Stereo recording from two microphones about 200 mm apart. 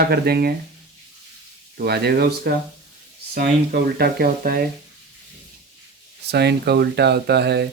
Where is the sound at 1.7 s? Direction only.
55° right (ahead or behind).